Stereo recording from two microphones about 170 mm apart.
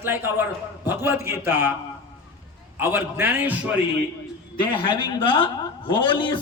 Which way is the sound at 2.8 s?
10° right (ahead or behind).